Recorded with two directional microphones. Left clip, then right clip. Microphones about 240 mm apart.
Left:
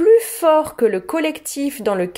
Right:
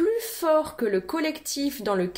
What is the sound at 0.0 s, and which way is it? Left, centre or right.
Speech, left.